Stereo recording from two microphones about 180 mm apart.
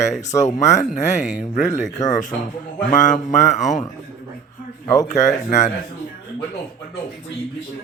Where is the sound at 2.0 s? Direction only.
45° left (ahead or behind).